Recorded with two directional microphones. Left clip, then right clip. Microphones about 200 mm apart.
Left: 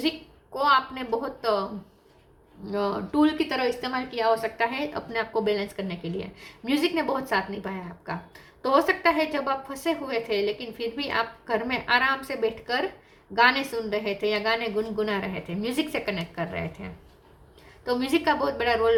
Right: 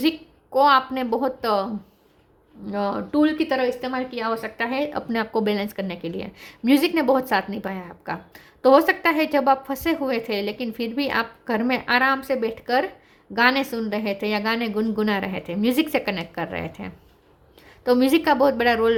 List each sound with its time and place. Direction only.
0.5 s speech: 50° right (ahead or behind)
2.7 s speech: 40° right (ahead or behind)